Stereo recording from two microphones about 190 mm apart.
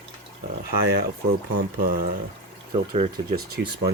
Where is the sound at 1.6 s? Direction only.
50° right (ahead or behind).